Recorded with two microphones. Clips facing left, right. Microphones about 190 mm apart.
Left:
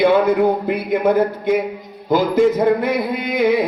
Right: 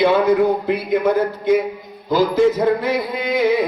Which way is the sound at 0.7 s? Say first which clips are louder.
Even; 55° left (ahead or behind).